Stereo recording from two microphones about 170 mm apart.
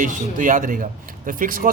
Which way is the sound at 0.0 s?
50° right (ahead or behind).